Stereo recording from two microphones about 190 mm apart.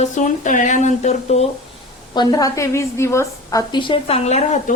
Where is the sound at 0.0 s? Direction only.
40° left (ahead or behind).